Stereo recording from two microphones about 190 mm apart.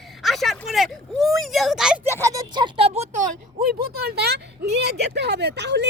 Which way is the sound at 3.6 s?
55° right (ahead or behind).